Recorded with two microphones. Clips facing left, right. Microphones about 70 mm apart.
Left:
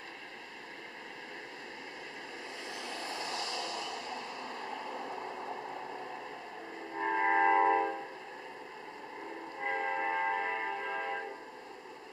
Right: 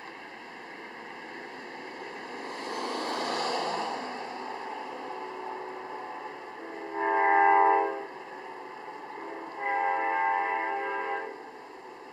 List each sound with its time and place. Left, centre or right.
2.4 s vehicle: right
7.0 s train: right
9.6 s train: right